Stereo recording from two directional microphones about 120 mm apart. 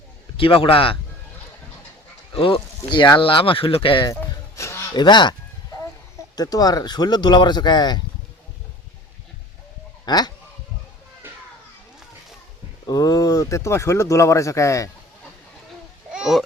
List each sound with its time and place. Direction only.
0.3 s speech: 45° left (ahead or behind)
2.3 s speech: 50° left (ahead or behind)
4.0 s a sound: 30° left (ahead or behind)
4.9 s speech: 40° left (ahead or behind)
6.3 s speech: 30° left (ahead or behind)
10.1 s speech: 35° left (ahead or behind)
12.8 s speech: 30° left (ahead or behind)
16.1 s a sound: 5° right (ahead or behind)